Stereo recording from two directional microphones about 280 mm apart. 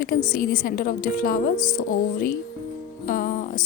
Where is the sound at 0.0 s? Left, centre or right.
Left.